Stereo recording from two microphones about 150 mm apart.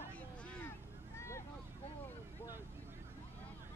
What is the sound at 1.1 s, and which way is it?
Boat, 20° left (ahead or behind).